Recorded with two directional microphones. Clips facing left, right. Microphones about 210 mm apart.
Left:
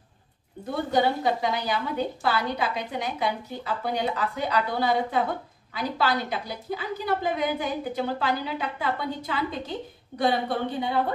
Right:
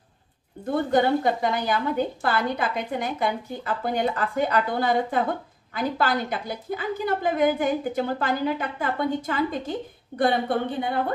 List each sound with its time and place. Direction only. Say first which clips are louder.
0.9 s a woman's voice: right 2 dB; 50° right (ahead or behind)